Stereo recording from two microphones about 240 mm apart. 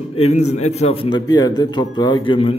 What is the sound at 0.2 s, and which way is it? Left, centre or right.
A man's voice, left.